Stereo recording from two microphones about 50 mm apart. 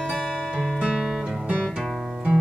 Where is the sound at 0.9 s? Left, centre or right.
Centre.